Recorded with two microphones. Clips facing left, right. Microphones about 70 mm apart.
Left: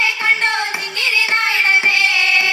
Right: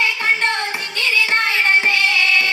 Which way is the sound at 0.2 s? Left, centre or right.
Centre.